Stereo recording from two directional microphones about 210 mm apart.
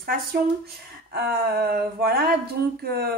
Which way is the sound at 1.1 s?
50° right (ahead or behind).